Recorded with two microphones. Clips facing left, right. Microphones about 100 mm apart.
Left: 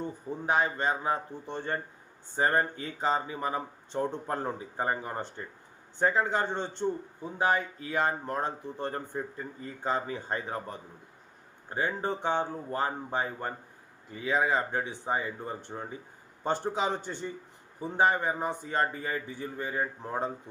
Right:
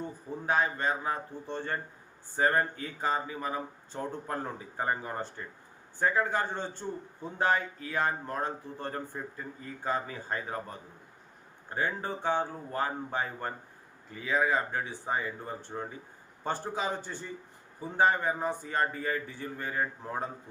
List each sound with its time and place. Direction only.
0.4 s speech: 20° left (ahead or behind)
7.3 s a man's voice: 10° left (ahead or behind)
7.8 s a man's voice: 20° left (ahead or behind)